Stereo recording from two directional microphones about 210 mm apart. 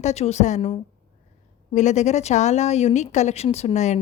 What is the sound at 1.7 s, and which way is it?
Speech, 35° left (ahead or behind).